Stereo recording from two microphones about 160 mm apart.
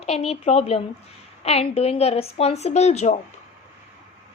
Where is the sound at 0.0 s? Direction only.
40° left (ahead or behind).